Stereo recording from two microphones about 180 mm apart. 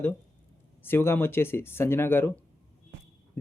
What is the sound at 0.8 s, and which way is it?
Speech, 10° left (ahead or behind).